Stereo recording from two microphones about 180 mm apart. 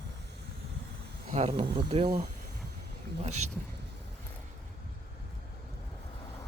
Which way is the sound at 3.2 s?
40° right (ahead or behind).